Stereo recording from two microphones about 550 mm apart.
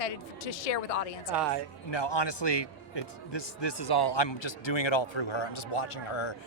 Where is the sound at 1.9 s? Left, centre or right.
Left.